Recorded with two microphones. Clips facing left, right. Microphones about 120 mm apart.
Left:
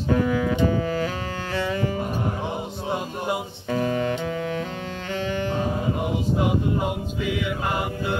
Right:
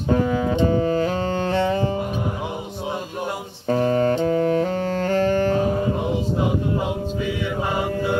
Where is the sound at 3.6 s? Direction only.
40° right (ahead or behind).